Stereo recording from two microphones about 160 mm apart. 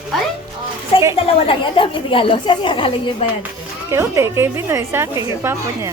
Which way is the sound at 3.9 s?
15° right (ahead or behind).